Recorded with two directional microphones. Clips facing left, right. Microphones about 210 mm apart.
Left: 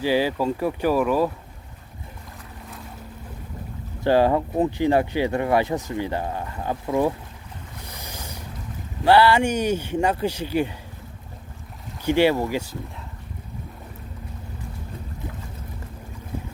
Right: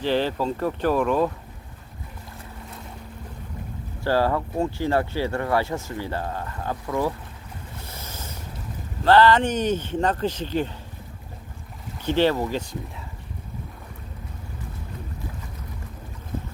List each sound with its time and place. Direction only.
0.0 s speech: 10° left (ahead or behind)
4.0 s speech: 20° left (ahead or behind)
7.9 s a sound: 15° left (ahead or behind)
9.0 s speech: 10° left (ahead or behind)
12.0 s speech: 10° left (ahead or behind)